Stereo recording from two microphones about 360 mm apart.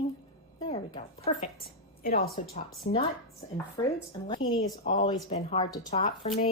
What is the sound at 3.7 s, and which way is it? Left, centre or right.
A woman's voice, centre.